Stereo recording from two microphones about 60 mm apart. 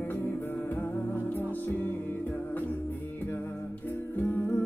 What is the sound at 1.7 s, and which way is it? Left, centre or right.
Music, left.